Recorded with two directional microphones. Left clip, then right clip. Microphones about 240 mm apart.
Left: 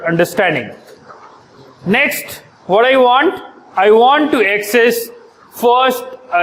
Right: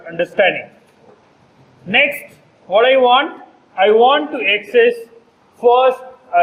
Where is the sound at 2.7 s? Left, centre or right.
Left.